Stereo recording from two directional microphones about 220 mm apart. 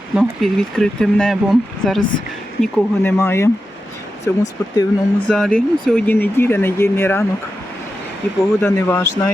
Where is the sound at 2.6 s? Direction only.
10° left (ahead or behind).